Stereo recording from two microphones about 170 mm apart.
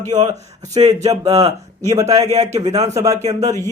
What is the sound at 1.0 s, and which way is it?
Speech, 40° right (ahead or behind).